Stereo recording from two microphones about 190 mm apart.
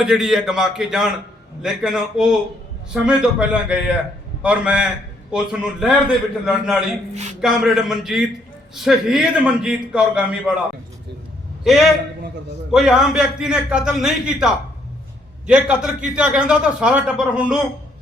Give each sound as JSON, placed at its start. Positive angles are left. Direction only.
{"t": 0.0, "sound": "a man's voice", "side_deg": -5}
{"t": 7.1, "sound": "speech", "side_deg": -35}
{"t": 7.4, "sound": "a man's voice", "side_deg": 0}
{"t": 11.6, "sound": "a man's voice", "side_deg": 0}